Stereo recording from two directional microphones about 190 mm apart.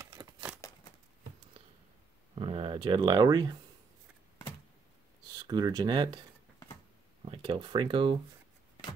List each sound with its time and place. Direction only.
0.0 s a sound: 20° right (ahead or behind)
2.3 s speech: 30° right (ahead or behind)
5.3 s speech: 20° right (ahead or behind)
7.2 s speech: 25° right (ahead or behind)